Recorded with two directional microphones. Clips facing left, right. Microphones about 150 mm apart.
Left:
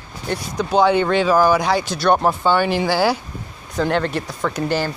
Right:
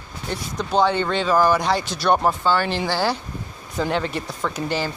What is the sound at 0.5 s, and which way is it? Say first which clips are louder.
Speech: left 4 dB; 5° left (ahead or behind).